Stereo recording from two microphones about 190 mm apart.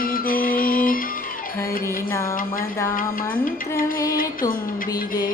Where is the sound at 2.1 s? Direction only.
15° left (ahead or behind).